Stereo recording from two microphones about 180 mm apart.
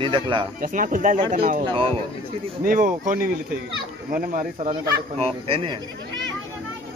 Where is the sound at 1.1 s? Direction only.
25° right (ahead or behind).